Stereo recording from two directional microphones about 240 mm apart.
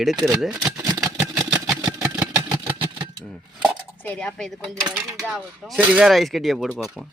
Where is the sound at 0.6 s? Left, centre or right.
Centre.